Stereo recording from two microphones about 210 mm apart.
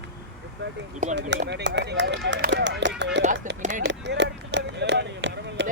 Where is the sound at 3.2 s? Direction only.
35° right (ahead or behind).